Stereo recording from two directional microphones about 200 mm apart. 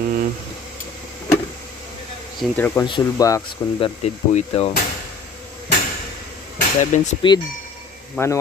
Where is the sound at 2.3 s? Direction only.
10° left (ahead or behind).